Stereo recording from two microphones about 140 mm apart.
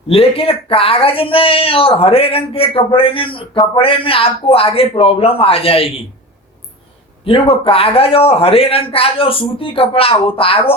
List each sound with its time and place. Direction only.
0.1 s speech: 40° left (ahead or behind)
7.3 s speech: 40° left (ahead or behind)